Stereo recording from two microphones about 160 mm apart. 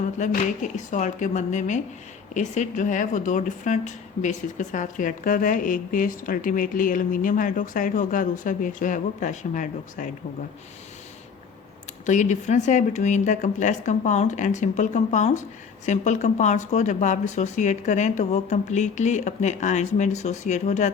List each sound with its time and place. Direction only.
0.2 s speech: 45° left (ahead or behind)
12.0 s speech: 50° left (ahead or behind)